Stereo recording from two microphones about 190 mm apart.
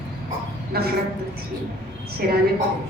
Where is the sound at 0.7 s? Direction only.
55° right (ahead or behind).